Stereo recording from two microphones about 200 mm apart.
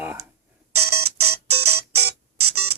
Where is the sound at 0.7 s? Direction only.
90° right.